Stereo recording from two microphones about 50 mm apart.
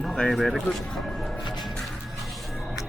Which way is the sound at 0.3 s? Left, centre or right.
Centre.